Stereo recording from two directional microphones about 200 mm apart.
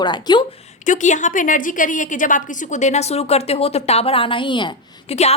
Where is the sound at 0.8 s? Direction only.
40° left (ahead or behind).